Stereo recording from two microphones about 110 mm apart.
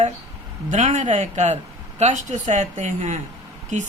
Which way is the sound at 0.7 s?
90° right.